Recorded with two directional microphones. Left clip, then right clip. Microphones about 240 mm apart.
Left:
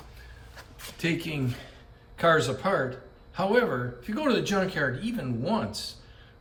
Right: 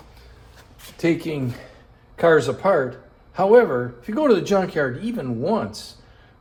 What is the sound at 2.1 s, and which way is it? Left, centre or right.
Speech, right.